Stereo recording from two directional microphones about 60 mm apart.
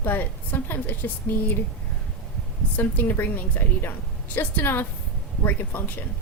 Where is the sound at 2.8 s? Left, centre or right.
Left.